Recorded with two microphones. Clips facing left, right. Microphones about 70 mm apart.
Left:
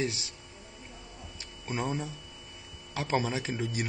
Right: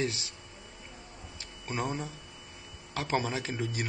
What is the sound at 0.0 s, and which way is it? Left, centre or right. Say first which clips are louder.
Speech: even; left.